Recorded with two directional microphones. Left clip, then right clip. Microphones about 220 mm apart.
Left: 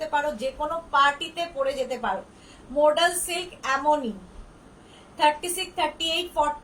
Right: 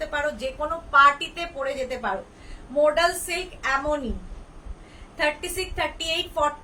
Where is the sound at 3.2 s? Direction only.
15° right (ahead or behind).